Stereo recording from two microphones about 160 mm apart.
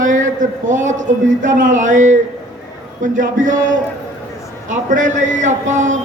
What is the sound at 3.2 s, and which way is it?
A man's voice, 55° right (ahead or behind).